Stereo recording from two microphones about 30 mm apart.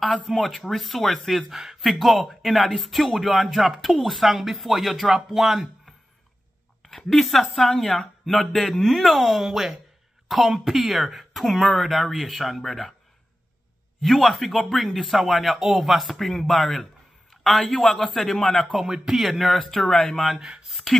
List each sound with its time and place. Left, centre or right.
0.2 s speech: centre
1.5 s speech: centre
1.8 s speech: centre
6.8 s a man's voice: centre
9.5 s speech: centre
10.2 s speech: centre
14.0 s a man's voice: centre
18.9 s speech: centre
19.2 s speech: centre